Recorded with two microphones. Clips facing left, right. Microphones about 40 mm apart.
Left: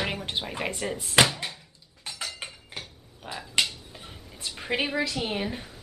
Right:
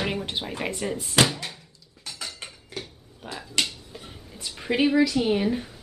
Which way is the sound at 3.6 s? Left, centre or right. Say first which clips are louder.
Left 1 dB; centre.